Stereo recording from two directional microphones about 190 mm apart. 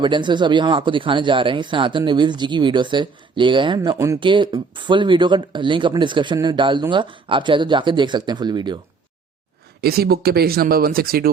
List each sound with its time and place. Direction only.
0.0 s speech: 25° right (ahead or behind)
9.8 s speech: 55° right (ahead or behind)